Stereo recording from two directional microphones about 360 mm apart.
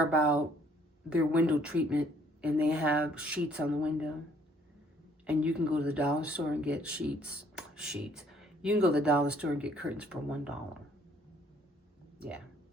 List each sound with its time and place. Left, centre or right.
0.1 s speech: centre
5.2 s speech: centre